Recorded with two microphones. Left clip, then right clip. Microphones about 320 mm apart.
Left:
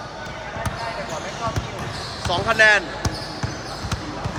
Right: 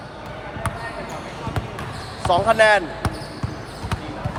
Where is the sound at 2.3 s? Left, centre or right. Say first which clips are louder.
Right 1 dB; centre.